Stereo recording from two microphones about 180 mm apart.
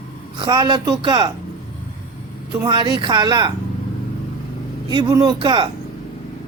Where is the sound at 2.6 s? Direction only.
25° right (ahead or behind).